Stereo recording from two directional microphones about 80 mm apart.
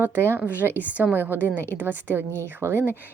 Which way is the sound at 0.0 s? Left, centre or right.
Right.